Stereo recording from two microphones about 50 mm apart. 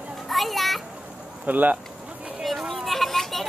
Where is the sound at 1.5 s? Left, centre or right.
Right.